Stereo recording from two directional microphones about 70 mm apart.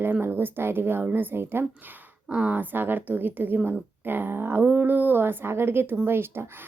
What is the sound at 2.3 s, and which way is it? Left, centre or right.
A woman's voice, right.